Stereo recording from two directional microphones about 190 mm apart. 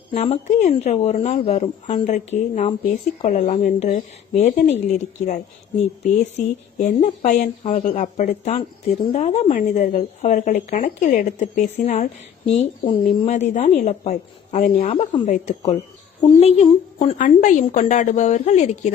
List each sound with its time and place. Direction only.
0.1 s speech: 35° left (ahead or behind)
6.0 s speech: 40° left (ahead or behind)